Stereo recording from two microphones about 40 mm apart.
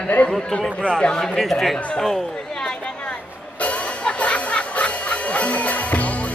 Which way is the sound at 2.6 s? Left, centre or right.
Left.